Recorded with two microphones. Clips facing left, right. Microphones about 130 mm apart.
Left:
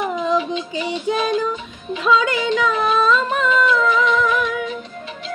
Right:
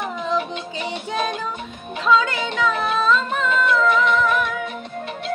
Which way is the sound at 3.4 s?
55° right (ahead or behind).